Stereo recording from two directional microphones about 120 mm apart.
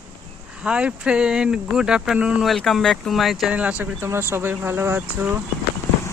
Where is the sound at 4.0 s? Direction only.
20° right (ahead or behind).